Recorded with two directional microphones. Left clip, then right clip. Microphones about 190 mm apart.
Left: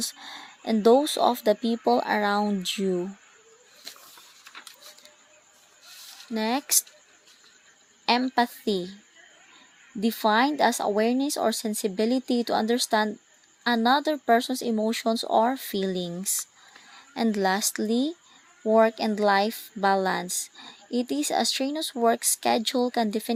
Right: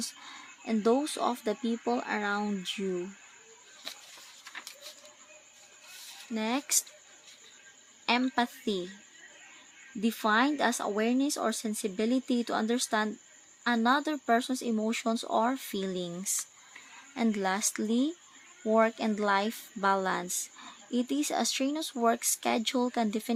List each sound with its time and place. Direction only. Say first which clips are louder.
0.0 s speech: left 6 dB; 30° left (ahead or behind)
6.3 s speech: left 5 dB; 25° left (ahead or behind)
8.0 s speech: left 5 dB; 25° left (ahead or behind)
10.0 s speech: left 5 dB; 25° left (ahead or behind)